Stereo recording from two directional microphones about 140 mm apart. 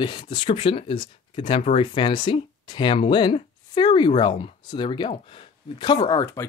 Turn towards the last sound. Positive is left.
turn(degrees=30)  # may be behind; listen again after turning